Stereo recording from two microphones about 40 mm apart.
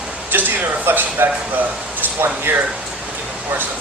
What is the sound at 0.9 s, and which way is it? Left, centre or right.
Speech, right.